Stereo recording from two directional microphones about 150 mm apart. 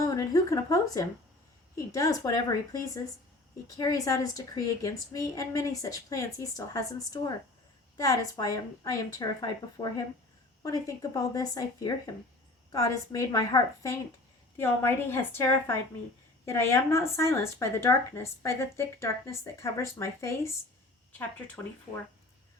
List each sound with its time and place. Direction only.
0.0 s a woman's voice: 25° left (ahead or behind)